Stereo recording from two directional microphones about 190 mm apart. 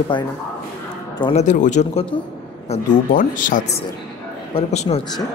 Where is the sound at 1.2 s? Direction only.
35° left (ahead or behind).